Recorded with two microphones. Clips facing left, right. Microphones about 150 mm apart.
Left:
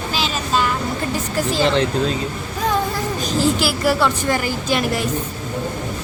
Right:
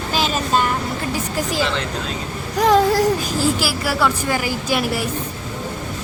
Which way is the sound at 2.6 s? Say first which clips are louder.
Right 7 dB; 90° right.